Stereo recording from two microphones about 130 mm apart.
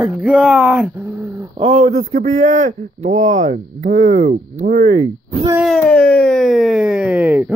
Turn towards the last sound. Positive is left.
turn(degrees=-10)  # may be behind; listen again after turning